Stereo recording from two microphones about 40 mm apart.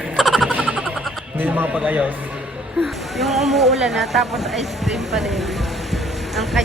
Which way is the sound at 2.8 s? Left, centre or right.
Centre.